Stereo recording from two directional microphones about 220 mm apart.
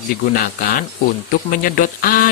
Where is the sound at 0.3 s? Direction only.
40° left (ahead or behind).